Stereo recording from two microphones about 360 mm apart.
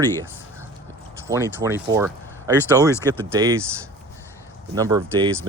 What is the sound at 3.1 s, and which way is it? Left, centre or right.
Speech, centre.